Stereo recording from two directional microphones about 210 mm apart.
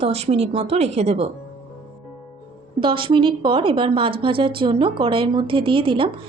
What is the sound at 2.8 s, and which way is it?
A woman's voice, 25° right (ahead or behind).